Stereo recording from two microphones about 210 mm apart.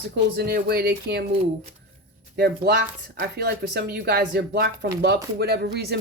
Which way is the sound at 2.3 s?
50° right (ahead or behind).